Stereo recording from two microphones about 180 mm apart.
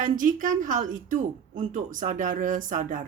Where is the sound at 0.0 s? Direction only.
45° right (ahead or behind).